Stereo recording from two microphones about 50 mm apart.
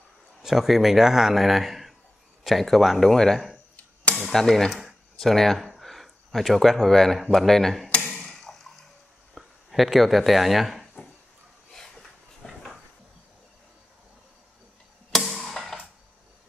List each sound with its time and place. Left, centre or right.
0.4 s a man's voice: centre
8.1 s tick-tock: centre
9.3 s speech: centre
11.7 s a sound: centre
15.0 s music: centre